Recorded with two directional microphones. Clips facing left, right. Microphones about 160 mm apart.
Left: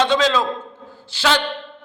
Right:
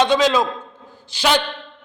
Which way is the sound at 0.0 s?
15° right (ahead or behind).